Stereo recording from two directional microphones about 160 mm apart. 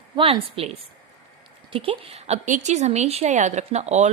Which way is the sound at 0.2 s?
35° right (ahead or behind).